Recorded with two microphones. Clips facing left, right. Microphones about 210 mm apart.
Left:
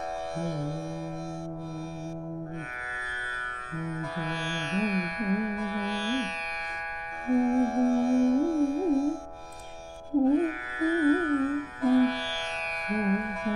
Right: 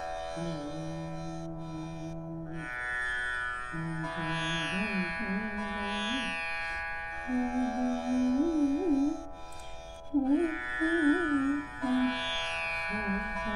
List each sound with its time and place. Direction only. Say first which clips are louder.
3.7 s music: left 3 dB; 45° left (ahead or behind)
10.3 s music: left 2 dB; 45° left (ahead or behind)